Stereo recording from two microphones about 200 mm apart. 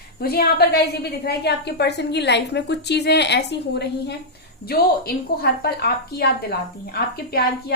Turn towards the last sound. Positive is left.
turn(degrees=50)  # may be behind; listen again after turning